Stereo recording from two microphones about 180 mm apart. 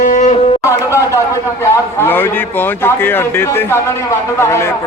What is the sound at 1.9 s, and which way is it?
Speech, 10° left (ahead or behind).